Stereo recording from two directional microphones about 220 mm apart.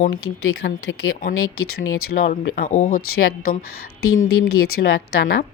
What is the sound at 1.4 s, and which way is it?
Speech, 75° left (ahead or behind).